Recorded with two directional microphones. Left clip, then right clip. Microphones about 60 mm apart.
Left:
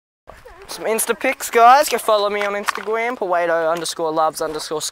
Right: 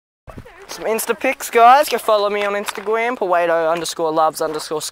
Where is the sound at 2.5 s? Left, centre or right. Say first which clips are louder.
Right 1 dB; right.